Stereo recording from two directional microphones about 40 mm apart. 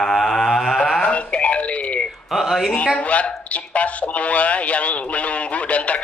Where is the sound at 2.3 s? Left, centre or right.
Centre.